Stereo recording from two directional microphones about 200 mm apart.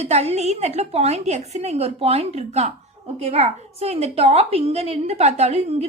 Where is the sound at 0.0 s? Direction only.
35° right (ahead or behind).